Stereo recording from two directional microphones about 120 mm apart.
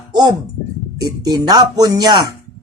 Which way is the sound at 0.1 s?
35° right (ahead or behind).